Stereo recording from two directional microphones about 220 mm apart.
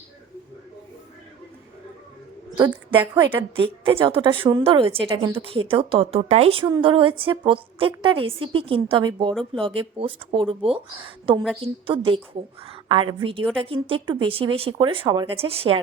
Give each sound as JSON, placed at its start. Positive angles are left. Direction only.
{"t": 2.6, "sound": "a woman's voice", "side_deg": -10}
{"t": 3.8, "sound": "a woman's voice", "side_deg": -25}